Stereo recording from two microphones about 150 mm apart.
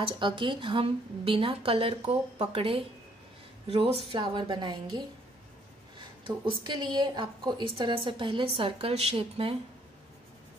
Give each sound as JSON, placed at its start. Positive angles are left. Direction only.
{"t": 0.0, "sound": "a woman's voice", "side_deg": -35}
{"t": 5.9, "sound": "a woman's voice", "side_deg": -30}